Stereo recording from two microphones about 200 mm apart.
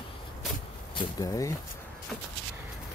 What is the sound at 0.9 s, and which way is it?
Speech, 20° left (ahead or behind).